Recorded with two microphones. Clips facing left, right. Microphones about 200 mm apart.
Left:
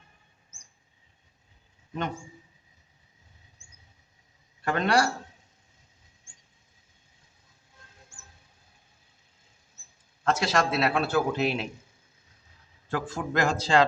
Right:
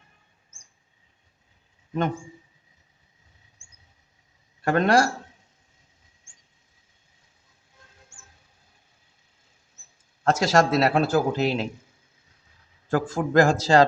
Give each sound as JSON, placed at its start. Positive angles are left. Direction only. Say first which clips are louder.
{"t": 4.6, "sound": "speech", "louder": "right 5 dB", "side_deg": -45}
{"t": 10.2, "sound": "speech", "louder": "right 5 dB", "side_deg": -45}
{"t": 12.9, "sound": "speech", "louder": "right 7 dB", "side_deg": -45}